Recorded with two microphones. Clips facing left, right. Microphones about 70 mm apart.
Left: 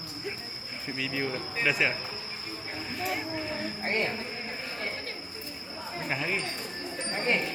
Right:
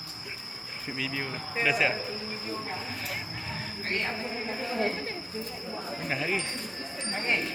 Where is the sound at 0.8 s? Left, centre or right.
Centre.